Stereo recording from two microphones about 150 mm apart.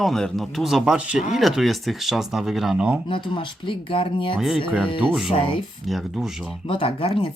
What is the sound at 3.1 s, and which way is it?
Speech, 35° left (ahead or behind).